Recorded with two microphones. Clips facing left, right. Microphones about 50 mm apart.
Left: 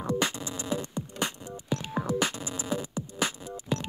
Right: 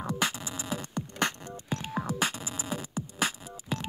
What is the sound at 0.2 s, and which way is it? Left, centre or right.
Music, right.